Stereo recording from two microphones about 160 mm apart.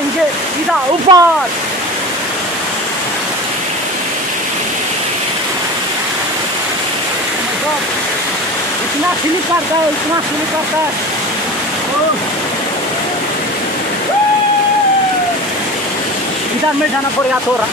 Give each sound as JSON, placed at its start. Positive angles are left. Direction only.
{"t": 1.1, "sound": "speech", "side_deg": -40}